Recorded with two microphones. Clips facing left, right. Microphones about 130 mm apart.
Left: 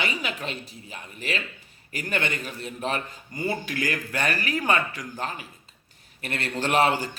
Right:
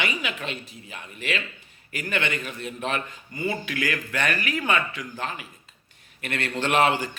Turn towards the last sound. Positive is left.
turn(degrees=35)  # may be behind; listen again after turning